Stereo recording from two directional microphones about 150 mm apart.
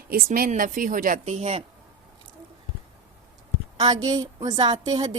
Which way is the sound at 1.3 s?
45° right (ahead or behind).